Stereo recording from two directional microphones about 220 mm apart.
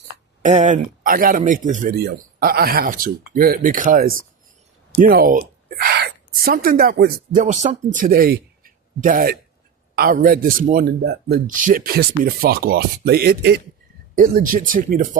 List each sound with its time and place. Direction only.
0.4 s a woman's voice: 35° right (ahead or behind)